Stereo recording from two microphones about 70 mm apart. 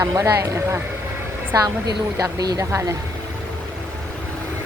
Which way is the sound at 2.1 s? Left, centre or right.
Right.